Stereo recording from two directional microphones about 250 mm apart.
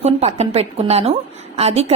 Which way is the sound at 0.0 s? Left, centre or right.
Right.